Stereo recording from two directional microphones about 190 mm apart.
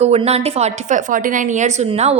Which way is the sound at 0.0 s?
35° right (ahead or behind).